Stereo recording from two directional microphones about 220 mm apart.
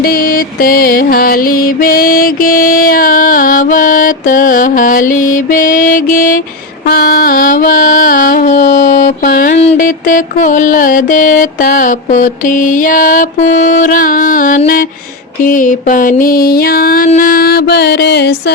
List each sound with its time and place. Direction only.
0.0 s music: 40° left (ahead or behind)
15.4 s mantra: 35° left (ahead or behind)